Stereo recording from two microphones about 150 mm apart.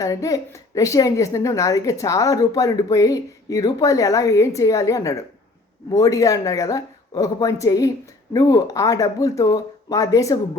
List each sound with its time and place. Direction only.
0.0 s a woman's voice: 20° left (ahead or behind)